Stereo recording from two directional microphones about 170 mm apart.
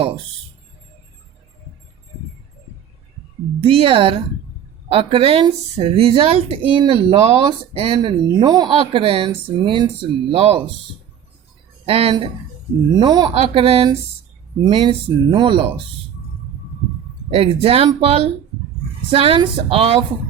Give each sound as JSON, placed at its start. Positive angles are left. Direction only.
{"t": 3.6, "sound": "speech", "side_deg": -35}
{"t": 11.9, "sound": "speech", "side_deg": -35}
{"t": 17.3, "sound": "speech", "side_deg": -35}